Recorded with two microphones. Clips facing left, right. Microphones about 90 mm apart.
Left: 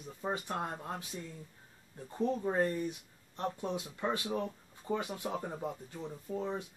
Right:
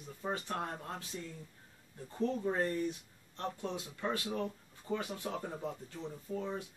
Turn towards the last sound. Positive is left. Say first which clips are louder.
# left 2 dB
turn(degrees=20)  # may be behind; listen again after turning